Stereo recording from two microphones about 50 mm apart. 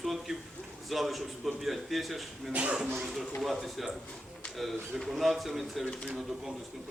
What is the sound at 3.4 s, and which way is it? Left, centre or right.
A man's voice, centre.